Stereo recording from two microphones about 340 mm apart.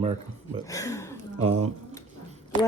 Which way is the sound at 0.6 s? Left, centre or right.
Centre.